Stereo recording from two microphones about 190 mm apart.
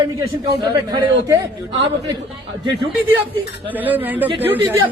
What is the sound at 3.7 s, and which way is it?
Speech, 10° right (ahead or behind).